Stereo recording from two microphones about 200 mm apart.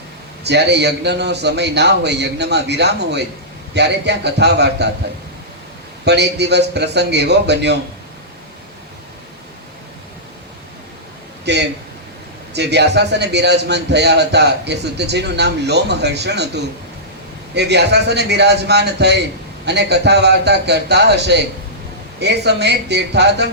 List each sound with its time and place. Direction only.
0.4 s a man's voice: 60° right (ahead or behind)
6.1 s a man's voice: 55° right (ahead or behind)
11.5 s a man's voice: 60° right (ahead or behind)
17.5 s a man's voice: 55° right (ahead or behind)